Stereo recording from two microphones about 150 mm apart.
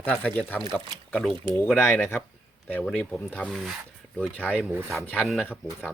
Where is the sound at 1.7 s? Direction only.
10° left (ahead or behind).